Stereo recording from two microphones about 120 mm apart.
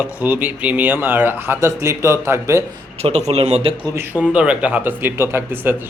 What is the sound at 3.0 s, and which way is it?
Speech, 60° right (ahead or behind).